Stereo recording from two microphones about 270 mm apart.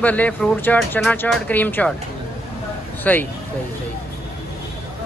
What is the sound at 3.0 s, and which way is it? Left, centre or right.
Speech, centre.